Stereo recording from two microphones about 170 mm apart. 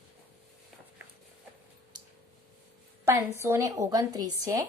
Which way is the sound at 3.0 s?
15° right (ahead or behind).